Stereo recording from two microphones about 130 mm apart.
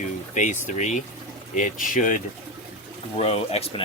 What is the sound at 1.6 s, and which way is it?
Speech, 85° left.